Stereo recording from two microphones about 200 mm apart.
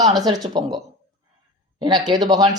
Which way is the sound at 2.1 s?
25° right (ahead or behind).